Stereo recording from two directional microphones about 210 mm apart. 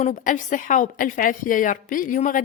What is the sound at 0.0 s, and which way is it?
Speech, 35° left (ahead or behind).